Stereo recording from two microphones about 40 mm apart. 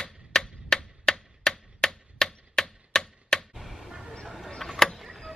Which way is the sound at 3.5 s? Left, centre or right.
Centre.